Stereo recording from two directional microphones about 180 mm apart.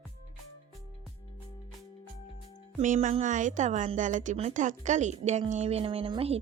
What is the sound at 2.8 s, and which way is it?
Speech, 45° right (ahead or behind).